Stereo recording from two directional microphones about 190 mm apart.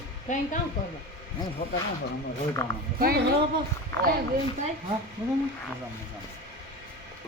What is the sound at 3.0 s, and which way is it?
Speech, 55° right (ahead or behind).